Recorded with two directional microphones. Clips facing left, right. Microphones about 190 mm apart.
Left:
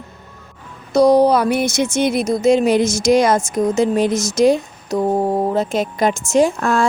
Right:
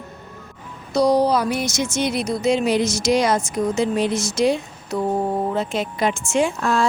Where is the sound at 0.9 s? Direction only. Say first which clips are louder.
Left 5 dB; 55° left (ahead or behind).